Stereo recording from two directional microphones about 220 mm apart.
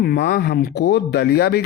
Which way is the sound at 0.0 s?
45° left (ahead or behind).